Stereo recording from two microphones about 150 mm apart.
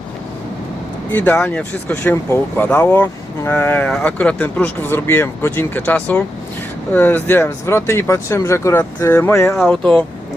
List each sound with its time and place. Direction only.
1.1 s speech: 10° left (ahead or behind)